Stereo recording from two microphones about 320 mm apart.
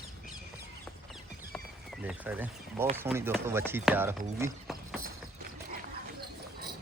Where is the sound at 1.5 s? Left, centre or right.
Centre.